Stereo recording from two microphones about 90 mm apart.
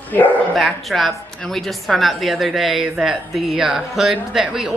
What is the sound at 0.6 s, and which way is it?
A woman's voice, centre (ahead or behind).